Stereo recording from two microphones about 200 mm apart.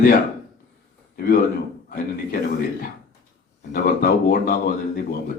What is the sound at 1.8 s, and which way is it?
Speech, 45° left (ahead or behind).